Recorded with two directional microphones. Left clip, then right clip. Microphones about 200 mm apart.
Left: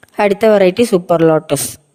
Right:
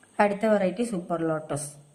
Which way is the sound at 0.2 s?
45° left (ahead or behind).